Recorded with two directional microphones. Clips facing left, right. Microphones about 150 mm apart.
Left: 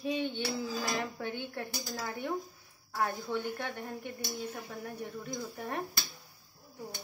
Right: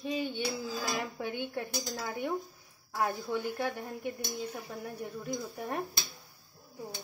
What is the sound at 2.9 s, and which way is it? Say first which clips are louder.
Speech: right 1 dB; 10° right (ahead or behind).